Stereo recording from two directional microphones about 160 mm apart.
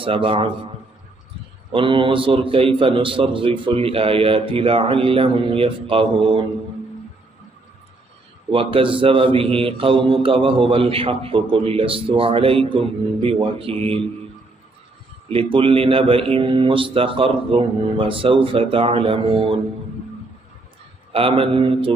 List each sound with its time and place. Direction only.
0.0 s a man's voice: 35° right (ahead or behind)
1.7 s a man's voice: 35° right (ahead or behind)
8.5 s a man's voice: 35° right (ahead or behind)
15.2 s a man's voice: 35° right (ahead or behind)
21.1 s a man's voice: 35° right (ahead or behind)